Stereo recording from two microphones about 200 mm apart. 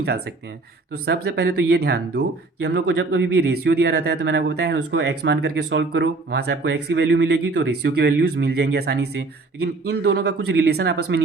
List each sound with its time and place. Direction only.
1.0 s speech: 55° right (ahead or behind)